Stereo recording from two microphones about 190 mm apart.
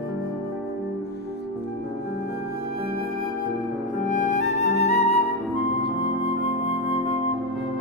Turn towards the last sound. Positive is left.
turn(degrees=30)  # may be behind; listen again after turning